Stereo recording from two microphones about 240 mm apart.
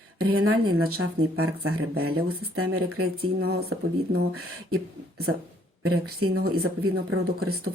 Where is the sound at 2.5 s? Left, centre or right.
Right.